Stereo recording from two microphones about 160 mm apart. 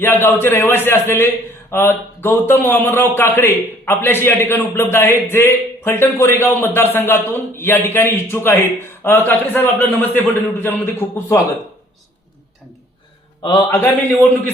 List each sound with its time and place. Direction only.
0.0 s a man's voice: 15° left (ahead or behind)
13.4 s a man's voice: 25° left (ahead or behind)